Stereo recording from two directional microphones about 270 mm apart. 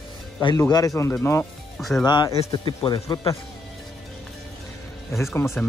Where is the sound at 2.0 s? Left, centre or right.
Centre.